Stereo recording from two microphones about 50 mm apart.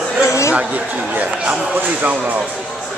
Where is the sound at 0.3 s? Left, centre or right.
Left.